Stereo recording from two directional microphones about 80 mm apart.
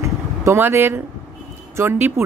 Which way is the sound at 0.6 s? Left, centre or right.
Right.